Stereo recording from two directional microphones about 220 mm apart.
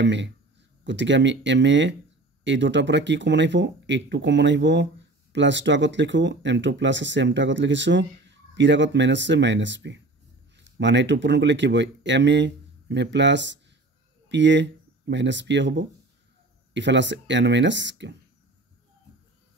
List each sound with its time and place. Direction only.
0.0 s speech: 55° right (ahead or behind)